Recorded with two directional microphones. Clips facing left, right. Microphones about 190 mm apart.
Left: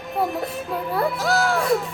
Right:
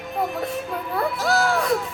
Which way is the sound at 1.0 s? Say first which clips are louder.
Even; centre (ahead or behind).